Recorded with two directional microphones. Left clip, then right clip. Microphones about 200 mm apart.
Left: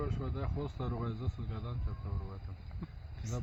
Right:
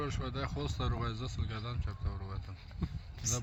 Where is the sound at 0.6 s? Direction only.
30° right (ahead or behind).